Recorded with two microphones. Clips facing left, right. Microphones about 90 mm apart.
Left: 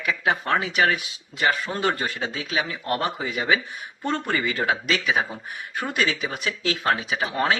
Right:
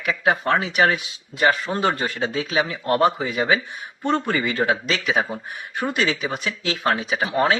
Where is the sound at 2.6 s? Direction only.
30° right (ahead or behind).